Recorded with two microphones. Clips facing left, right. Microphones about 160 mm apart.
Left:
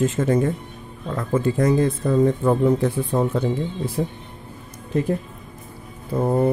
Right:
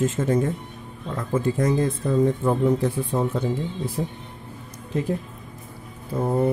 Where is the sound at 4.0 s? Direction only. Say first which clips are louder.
Left 4 dB; 90° left.